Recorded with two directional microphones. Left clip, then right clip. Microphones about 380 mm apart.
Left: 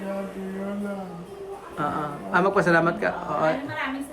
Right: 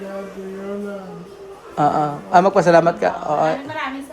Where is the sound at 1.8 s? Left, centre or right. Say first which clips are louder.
Right 11 dB; centre.